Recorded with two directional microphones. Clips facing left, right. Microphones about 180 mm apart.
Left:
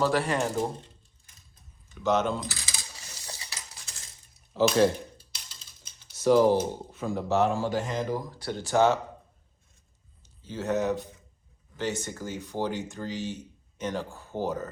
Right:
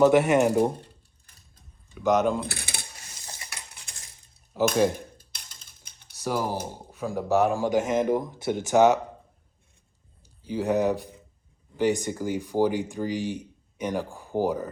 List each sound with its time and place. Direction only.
0.0 s speech: 20° right (ahead or behind)
2.0 s speech: 10° right (ahead or behind)
2.4 s coin: 60° right (ahead or behind)
3.8 s coin: 30° right (ahead or behind)
4.7 s speech: 10° right (ahead or behind)
5.1 s typing: 55° right (ahead or behind)
6.2 s speech: 10° right (ahead or behind)
10.4 s speech: 10° right (ahead or behind)